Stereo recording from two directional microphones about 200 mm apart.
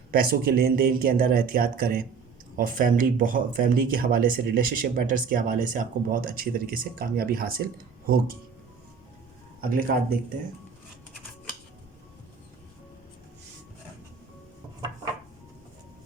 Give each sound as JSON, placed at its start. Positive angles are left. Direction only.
{"t": 0.1, "sound": "speech", "side_deg": -50}
{"t": 9.6, "sound": "speech", "side_deg": -45}